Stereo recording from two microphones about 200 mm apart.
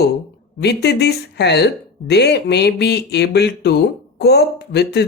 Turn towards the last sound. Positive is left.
turn(degrees=55)  # may be behind; listen again after turning